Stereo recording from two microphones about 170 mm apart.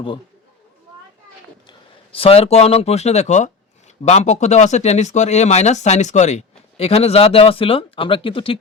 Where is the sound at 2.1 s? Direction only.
35° left (ahead or behind).